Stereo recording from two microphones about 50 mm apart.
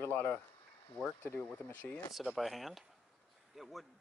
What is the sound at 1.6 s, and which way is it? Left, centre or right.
Speech, left.